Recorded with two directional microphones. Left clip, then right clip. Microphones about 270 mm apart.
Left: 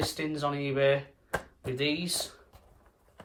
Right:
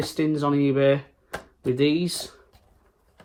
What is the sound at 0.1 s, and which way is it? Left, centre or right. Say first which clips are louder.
Speech: right 8 dB; centre.